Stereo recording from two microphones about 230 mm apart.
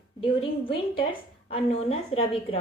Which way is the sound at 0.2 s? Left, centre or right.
Left.